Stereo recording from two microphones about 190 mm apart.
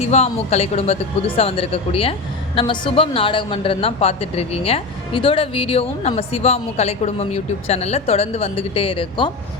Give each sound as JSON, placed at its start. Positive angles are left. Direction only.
{"t": 0.0, "sound": "a woman's voice", "side_deg": 35}